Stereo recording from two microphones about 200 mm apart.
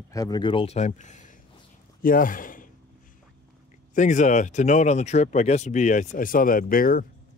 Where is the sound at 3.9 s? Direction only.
40° left (ahead or behind).